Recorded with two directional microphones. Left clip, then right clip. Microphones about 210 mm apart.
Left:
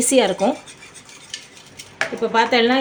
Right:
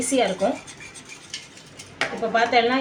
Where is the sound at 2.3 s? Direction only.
50° left (ahead or behind).